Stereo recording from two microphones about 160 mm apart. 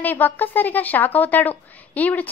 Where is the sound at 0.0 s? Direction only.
10° left (ahead or behind).